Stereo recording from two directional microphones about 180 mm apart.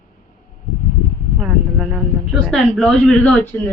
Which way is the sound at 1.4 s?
Centre (ahead or behind).